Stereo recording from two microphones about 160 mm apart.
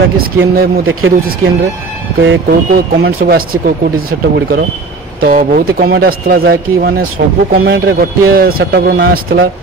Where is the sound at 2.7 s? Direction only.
70° right (ahead or behind).